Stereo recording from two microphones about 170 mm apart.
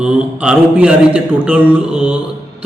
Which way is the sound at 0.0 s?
5° right (ahead or behind).